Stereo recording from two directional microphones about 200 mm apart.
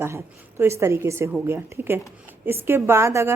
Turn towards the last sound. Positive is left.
turn(degrees=-15)  # may be behind; listen again after turning